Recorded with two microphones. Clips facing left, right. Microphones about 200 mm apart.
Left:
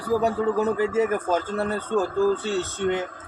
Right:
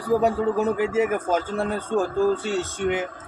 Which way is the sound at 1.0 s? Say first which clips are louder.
Right 1 dB; 10° right (ahead or behind).